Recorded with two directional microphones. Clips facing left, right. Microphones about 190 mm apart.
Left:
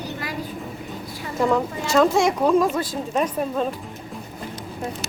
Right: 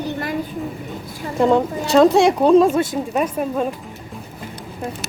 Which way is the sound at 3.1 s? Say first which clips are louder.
Right 2 dB; 5° right (ahead or behind).